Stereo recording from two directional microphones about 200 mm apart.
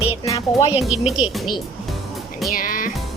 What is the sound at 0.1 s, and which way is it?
Music, 20° left (ahead or behind).